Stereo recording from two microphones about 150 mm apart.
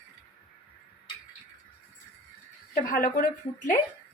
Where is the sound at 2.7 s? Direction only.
70° left (ahead or behind).